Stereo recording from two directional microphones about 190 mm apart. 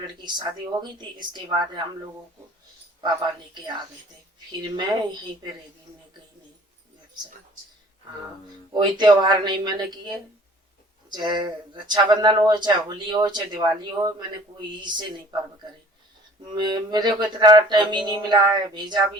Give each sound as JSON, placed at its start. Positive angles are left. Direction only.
{"t": 0.2, "sound": "speech", "side_deg": -25}
{"t": 3.5, "sound": "speech", "side_deg": -25}
{"t": 8.8, "sound": "speech", "side_deg": -25}